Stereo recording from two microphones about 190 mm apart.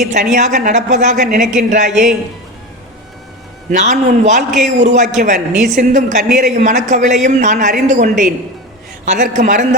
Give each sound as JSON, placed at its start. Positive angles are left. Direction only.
{"t": 0.0, "sound": "speech", "side_deg": -40}
{"t": 3.7, "sound": "speech", "side_deg": -40}